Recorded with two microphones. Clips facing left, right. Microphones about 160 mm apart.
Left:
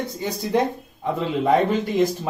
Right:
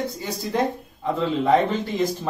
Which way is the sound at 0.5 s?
10° left (ahead or behind).